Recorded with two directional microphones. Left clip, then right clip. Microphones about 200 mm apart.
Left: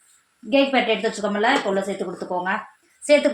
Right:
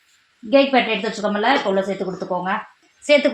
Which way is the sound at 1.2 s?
30° right (ahead or behind).